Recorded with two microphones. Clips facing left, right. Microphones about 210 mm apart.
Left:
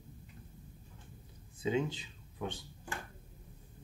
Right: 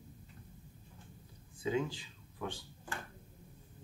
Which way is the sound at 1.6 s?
20° left (ahead or behind).